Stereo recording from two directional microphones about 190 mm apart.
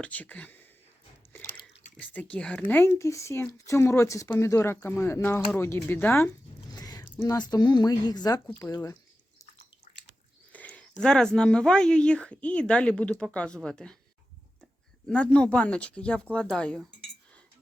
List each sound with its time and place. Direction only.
0.0 s speech: 10° left (ahead or behind)
10.5 s speech: 5° left (ahead or behind)